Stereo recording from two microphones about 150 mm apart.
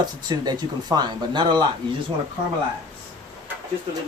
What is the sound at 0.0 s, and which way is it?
Speech, 25° right (ahead or behind).